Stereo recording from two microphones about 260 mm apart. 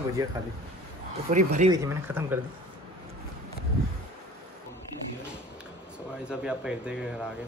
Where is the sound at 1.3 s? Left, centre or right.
Right.